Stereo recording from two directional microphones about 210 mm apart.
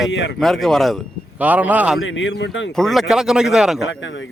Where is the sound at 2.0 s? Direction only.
65° left (ahead or behind).